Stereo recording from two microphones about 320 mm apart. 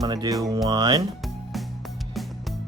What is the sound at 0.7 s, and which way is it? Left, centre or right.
Speech, centre.